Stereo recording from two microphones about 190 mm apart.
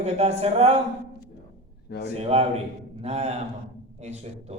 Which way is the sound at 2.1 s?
30° right (ahead or behind).